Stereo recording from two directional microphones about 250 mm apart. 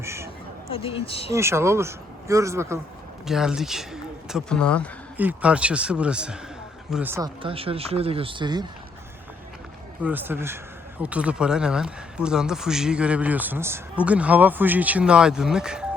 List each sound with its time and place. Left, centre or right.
0.0 s a sound: centre
0.7 s speech: left
1.3 s speech: centre
7.4 s speech: right
10.0 s speech: centre